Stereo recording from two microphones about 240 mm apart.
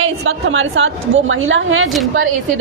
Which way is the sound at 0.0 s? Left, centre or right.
Right.